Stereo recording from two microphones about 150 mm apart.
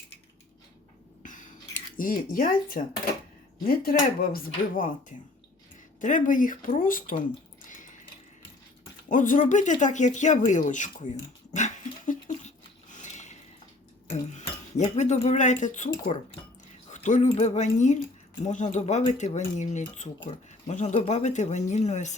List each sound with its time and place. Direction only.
1.2 s a sound: 60° left (ahead or behind)
3.6 s speech: 80° left
9.0 s speech: 60° left (ahead or behind)
11.5 s dog: 55° left (ahead or behind)
14.3 s speech: 50° left (ahead or behind)
16.9 s speech: 55° left (ahead or behind)